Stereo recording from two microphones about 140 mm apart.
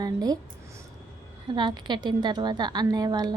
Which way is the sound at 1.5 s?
35° right (ahead or behind).